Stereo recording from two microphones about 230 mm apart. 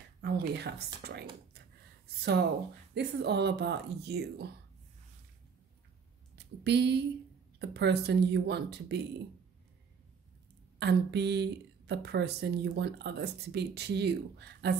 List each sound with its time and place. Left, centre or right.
0.2 s speech: right
6.3 s speech: right
10.8 s speech: right